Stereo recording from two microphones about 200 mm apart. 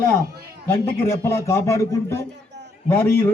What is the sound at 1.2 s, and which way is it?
A man's voice, 15° left (ahead or behind).